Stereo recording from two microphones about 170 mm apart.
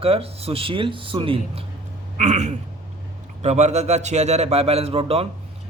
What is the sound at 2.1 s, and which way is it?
A man's voice, 45° right (ahead or behind).